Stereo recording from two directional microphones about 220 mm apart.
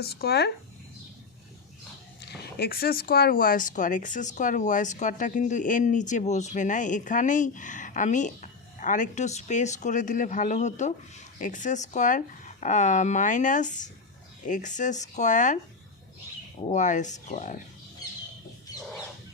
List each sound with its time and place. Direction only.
0.0 s speech: 45° left (ahead or behind)
2.2 s speech: 50° left (ahead or behind)
16.6 s speech: 35° left (ahead or behind)